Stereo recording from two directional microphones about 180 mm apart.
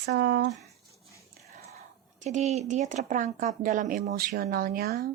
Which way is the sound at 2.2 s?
40° right (ahead or behind).